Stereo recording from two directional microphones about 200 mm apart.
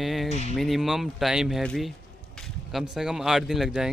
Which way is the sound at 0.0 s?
Centre (ahead or behind).